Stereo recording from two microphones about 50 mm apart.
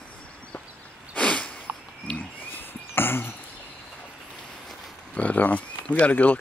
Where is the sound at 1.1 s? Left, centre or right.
Left.